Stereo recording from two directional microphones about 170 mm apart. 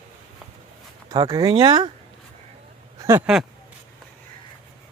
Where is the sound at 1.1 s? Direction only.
25° right (ahead or behind).